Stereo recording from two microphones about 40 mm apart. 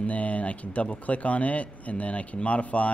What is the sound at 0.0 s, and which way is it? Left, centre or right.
A man's voice, left.